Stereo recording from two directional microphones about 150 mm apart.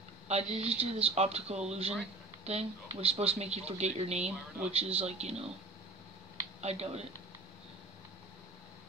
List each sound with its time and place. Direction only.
0.3 s speech: 45° right (ahead or behind)
6.6 s speech: 45° right (ahead or behind)